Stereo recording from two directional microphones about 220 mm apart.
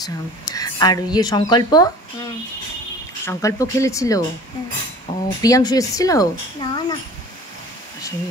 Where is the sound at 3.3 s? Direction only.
15° left (ahead or behind).